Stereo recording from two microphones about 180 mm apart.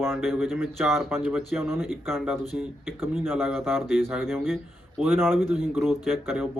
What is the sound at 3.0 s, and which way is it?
Speech, 10° right (ahead or behind).